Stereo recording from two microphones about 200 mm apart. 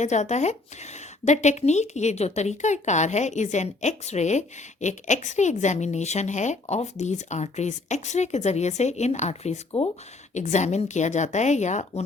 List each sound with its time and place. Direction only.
0.0 s speech: 35° left (ahead or behind)